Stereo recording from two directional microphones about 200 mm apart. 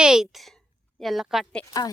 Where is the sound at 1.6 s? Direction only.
20° left (ahead or behind).